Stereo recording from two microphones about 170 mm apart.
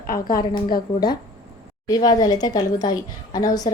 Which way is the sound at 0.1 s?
60° left (ahead or behind).